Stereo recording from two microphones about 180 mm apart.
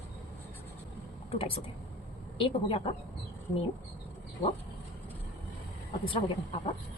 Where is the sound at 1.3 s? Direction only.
30° left (ahead or behind).